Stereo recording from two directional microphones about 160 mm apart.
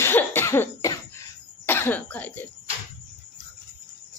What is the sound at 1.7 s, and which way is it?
Speech, 10° left (ahead or behind).